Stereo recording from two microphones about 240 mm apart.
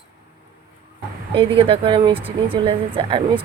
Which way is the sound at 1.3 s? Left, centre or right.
Right.